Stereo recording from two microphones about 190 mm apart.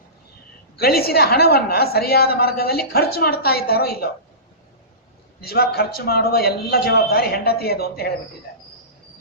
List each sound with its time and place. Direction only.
0.8 s a woman's voice: 55° left (ahead or behind)
5.4 s a woman's voice: 55° left (ahead or behind)